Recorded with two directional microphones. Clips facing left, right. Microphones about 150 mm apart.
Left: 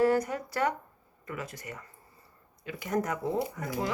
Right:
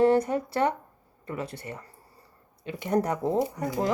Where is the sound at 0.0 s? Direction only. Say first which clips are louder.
Right 4 dB; 30° right (ahead or behind).